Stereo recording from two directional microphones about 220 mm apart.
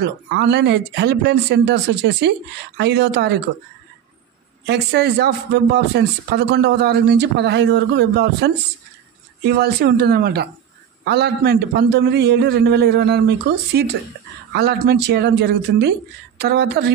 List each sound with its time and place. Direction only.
0.3 s a man's voice: 50° right (ahead or behind)
4.6 s a man's voice: 50° right (ahead or behind)